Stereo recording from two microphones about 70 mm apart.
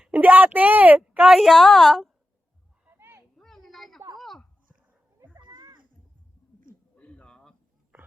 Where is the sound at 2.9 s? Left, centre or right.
Right.